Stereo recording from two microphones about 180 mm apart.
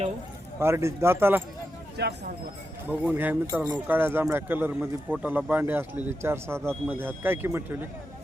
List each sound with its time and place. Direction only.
0.6 s speech: 15° right (ahead or behind)
2.0 s speech: 65° right (ahead or behind)
3.1 s speech: 10° right (ahead or behind)